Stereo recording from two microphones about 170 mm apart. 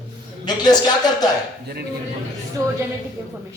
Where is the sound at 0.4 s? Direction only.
25° left (ahead or behind).